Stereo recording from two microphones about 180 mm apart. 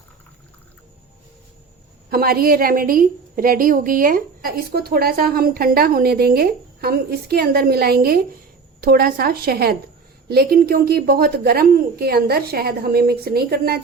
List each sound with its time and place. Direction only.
2.0 s a woman's voice: 55° right (ahead or behind)